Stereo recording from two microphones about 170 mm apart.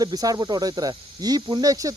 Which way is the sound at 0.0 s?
20° right (ahead or behind).